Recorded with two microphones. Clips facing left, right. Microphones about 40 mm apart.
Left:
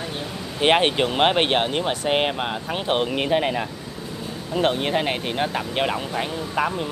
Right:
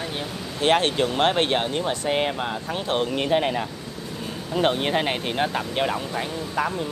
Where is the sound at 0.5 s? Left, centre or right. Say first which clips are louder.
Left 2 dB; left.